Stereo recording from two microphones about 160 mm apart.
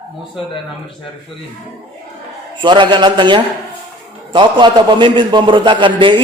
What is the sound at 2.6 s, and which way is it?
A man's voice, 30° right (ahead or behind).